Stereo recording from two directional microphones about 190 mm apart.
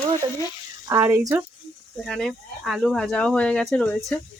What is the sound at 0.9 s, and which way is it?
Speech, 15° right (ahead or behind).